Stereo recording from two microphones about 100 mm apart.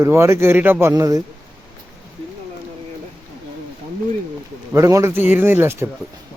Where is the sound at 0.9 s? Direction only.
35° right (ahead or behind).